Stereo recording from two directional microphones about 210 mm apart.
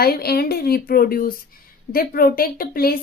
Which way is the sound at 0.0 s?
50° left (ahead or behind).